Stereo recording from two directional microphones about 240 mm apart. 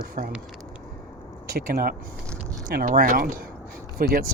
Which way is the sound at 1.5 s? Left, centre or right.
Right.